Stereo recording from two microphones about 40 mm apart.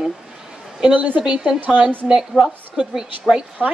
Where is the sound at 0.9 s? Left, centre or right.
Right.